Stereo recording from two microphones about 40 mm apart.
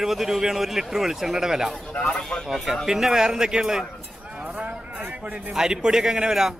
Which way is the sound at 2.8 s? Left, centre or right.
Centre.